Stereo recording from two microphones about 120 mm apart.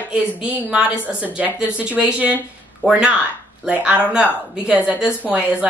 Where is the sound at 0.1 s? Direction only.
10° right (ahead or behind).